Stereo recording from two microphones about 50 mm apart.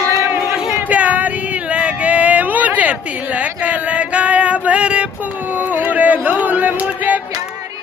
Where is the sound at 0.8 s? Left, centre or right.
Right.